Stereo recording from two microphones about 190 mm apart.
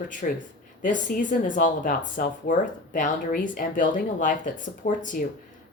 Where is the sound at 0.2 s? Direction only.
40° left (ahead or behind).